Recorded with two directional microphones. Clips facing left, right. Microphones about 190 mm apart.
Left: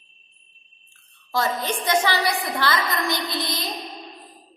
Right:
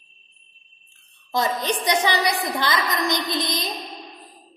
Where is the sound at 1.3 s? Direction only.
20° right (ahead or behind).